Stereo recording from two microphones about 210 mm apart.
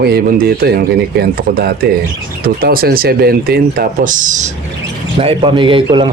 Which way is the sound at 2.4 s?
45° right (ahead or behind).